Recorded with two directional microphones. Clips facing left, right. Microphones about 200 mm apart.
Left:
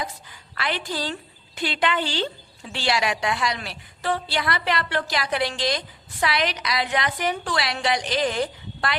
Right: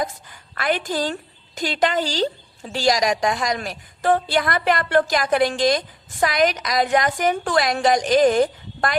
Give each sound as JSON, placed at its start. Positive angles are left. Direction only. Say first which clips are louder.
{"t": 0.0, "sound": "a woman's voice", "louder": "right 6 dB", "side_deg": -50}